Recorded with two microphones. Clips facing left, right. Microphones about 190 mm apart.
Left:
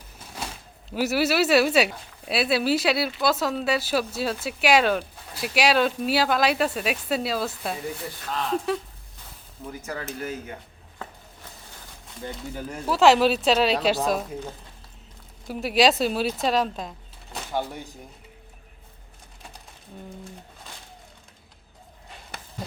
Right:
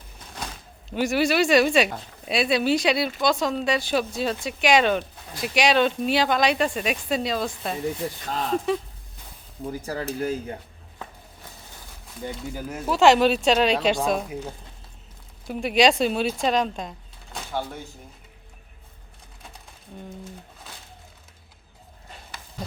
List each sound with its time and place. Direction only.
0.9 s speech: 5° left (ahead or behind)
9.8 s speech: 30° right (ahead or behind)
12.2 s speech: 5° right (ahead or behind)
14.3 s speech: 10° right (ahead or behind)
15.4 s speech: centre (ahead or behind)
17.5 s speech: 15° left (ahead or behind)